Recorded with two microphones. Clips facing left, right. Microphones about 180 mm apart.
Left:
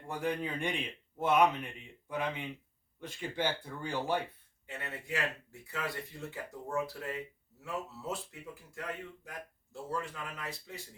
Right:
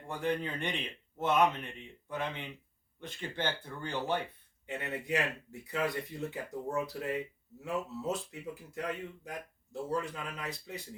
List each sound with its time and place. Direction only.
0.1 s speech: 5° left (ahead or behind)
4.6 s speech: 20° right (ahead or behind)